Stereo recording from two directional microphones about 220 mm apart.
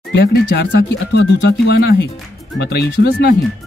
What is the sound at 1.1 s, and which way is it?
Speech, 50° left (ahead or behind).